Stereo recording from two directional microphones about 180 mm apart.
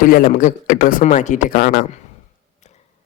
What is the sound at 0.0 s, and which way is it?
Speech, 50° left (ahead or behind).